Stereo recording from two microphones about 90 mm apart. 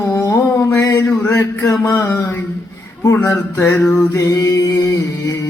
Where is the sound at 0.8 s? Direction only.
35° left (ahead or behind).